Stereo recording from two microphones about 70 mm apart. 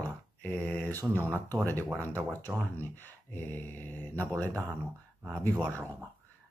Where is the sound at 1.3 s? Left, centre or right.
Left.